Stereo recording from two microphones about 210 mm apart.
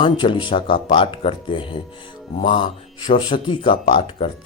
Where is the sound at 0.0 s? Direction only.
25° left (ahead or behind).